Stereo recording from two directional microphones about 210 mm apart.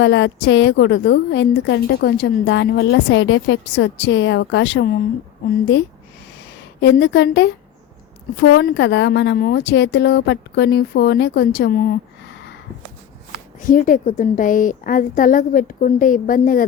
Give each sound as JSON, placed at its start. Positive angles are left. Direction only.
{"t": 0.0, "sound": "a woman's voice", "side_deg": 60}
{"t": 7.0, "sound": "a woman's voice", "side_deg": 60}
{"t": 13.7, "sound": "a woman's voice", "side_deg": 40}